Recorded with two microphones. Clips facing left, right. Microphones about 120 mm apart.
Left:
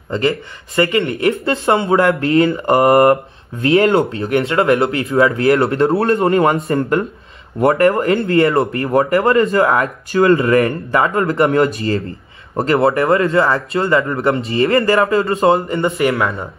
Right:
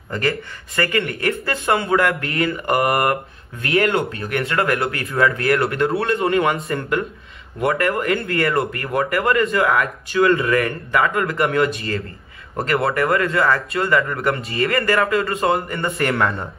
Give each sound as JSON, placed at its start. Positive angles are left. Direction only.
{"t": 0.1, "sound": "speech", "side_deg": 25}
{"t": 16.0, "sound": "speech", "side_deg": 5}